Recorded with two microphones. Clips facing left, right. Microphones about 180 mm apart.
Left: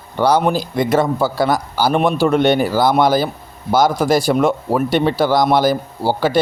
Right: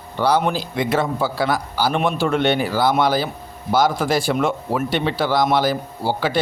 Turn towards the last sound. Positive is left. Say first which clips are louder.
# left 5 dB
turn(degrees=40)  # may be behind; listen again after turning